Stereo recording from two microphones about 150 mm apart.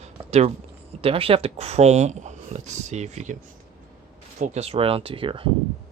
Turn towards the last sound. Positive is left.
turn(degrees=-35)  # may be behind; listen again after turning